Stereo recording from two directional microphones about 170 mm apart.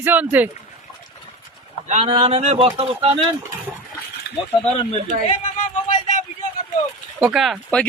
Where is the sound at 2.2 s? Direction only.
40° right (ahead or behind).